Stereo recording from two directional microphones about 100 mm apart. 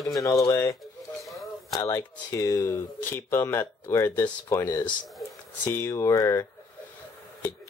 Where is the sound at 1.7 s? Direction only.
30° left (ahead or behind).